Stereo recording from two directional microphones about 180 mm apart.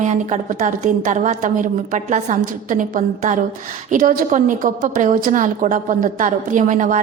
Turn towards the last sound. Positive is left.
turn(degrees=-45)  # may be behind; listen again after turning